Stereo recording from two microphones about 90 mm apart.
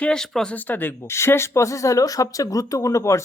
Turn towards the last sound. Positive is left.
turn(degrees=35)  # may be behind; listen again after turning